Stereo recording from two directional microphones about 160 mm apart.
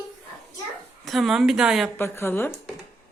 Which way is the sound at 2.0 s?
15° left (ahead or behind).